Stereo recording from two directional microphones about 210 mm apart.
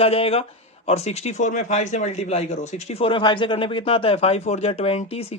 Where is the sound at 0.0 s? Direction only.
30° left (ahead or behind).